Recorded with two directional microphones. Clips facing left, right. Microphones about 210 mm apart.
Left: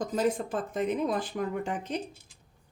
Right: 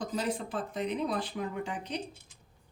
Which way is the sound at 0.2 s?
50° left (ahead or behind).